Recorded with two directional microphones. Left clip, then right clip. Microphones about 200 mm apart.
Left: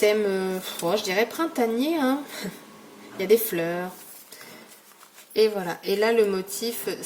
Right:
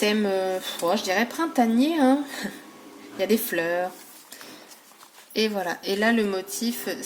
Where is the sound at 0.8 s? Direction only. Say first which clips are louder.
Even; 35° right (ahead or behind).